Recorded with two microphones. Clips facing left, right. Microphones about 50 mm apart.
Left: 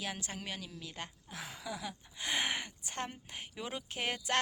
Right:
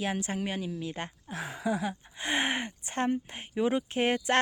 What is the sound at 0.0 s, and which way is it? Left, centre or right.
Speech, right.